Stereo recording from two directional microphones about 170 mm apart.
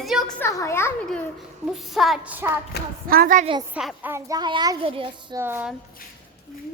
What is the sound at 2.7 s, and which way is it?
Speech, 75° left (ahead or behind).